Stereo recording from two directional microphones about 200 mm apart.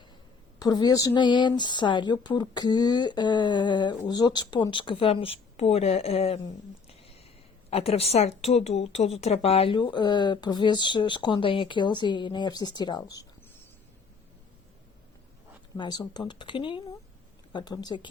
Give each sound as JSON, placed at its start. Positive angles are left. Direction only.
{"t": 0.6, "sound": "a woman's voice", "side_deg": 20}
{"t": 6.8, "sound": "a sound", "side_deg": 30}
{"t": 7.7, "sound": "a woman's voice", "side_deg": 30}
{"t": 15.8, "sound": "a woman's voice", "side_deg": 20}